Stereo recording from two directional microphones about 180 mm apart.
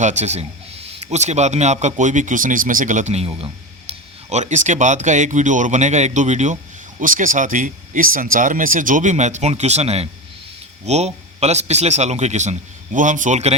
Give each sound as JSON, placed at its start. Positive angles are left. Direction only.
{"t": 0.0, "sound": "speech", "side_deg": -40}